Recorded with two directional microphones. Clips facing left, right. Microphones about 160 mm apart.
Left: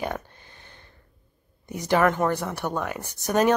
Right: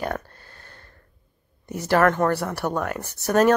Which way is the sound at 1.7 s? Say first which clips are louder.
Right 2 dB; 5° right (ahead or behind).